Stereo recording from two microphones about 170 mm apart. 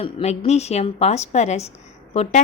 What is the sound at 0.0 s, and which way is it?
A woman's voice, 40° left (ahead or behind).